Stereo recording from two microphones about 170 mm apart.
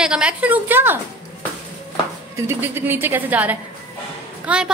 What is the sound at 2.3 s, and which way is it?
A woman's voice, 15° right (ahead or behind).